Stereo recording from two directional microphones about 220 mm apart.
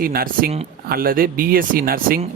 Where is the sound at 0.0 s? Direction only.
40° right (ahead or behind).